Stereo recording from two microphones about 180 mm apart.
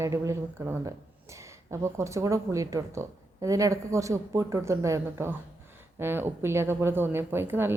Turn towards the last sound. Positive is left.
turn(degrees=-10)  # may be behind; listen again after turning